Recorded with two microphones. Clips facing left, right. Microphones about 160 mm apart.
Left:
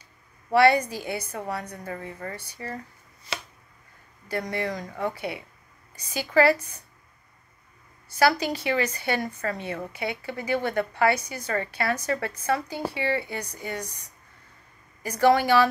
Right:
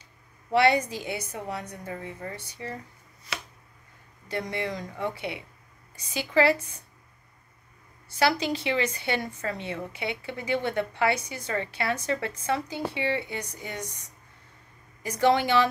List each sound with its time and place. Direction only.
0.5 s a woman's voice: 20° right (ahead or behind)
4.3 s a woman's voice: 20° right (ahead or behind)
8.2 s a woman's voice: 25° right (ahead or behind)
15.0 s a woman's voice: 20° right (ahead or behind)